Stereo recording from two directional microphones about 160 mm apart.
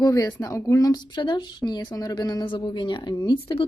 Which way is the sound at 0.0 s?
20° left (ahead or behind).